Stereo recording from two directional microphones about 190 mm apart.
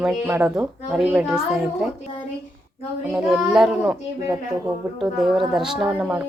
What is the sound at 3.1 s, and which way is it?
Speech, 5° right (ahead or behind).